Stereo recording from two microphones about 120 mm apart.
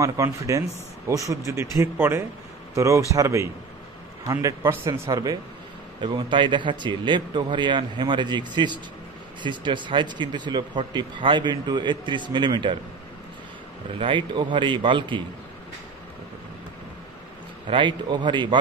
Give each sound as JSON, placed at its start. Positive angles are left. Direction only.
{"t": 0.0, "sound": "speech", "side_deg": -25}
{"t": 5.9, "sound": "speech", "side_deg": -40}
{"t": 13.9, "sound": "speech", "side_deg": -45}
{"t": 17.6, "sound": "speech", "side_deg": -45}